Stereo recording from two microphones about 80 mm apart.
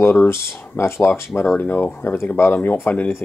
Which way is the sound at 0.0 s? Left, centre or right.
Left.